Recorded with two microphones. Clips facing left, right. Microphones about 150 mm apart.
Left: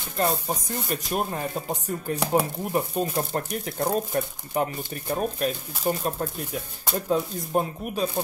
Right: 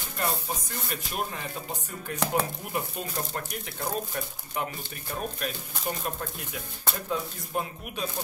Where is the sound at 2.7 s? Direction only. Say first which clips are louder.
Left 7 dB; 35° left (ahead or behind).